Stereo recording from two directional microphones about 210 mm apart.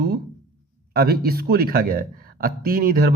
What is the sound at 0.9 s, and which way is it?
Speech, 45° right (ahead or behind).